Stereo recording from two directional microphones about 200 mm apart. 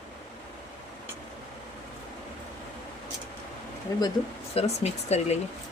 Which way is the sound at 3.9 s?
15° left (ahead or behind).